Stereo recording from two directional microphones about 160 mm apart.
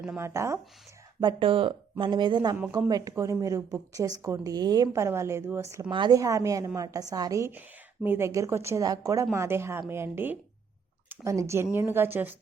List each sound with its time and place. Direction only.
0.2 s speech: 15° right (ahead or behind)
1.2 s a woman's voice: 30° right (ahead or behind); by 12.4 s 10° right (ahead or behind)